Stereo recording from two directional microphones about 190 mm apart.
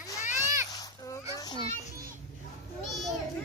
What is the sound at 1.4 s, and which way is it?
Children playing, 20° left (ahead or behind).